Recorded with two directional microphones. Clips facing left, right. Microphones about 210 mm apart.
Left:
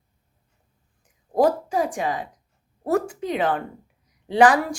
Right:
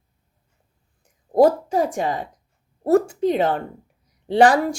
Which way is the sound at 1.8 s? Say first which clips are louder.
Right 3 dB; 40° right (ahead or behind).